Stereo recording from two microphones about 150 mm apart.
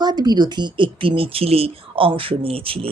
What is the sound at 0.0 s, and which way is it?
A woman's voice, 25° right (ahead or behind).